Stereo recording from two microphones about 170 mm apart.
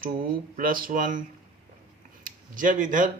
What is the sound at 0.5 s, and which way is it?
Speech, 55° right (ahead or behind).